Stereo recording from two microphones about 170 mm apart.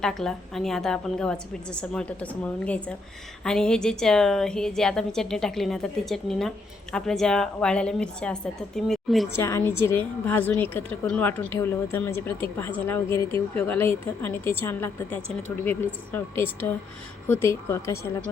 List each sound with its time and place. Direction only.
0.0 s a woman's voice: 5° left (ahead or behind)
9.3 s a woman's voice: 15° left (ahead or behind)